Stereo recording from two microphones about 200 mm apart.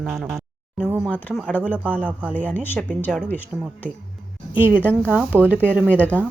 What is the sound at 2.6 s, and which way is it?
Speech, 10° left (ahead or behind).